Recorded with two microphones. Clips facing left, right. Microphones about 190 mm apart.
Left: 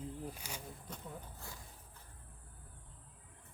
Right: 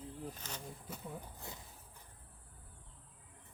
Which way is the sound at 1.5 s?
20° right (ahead or behind).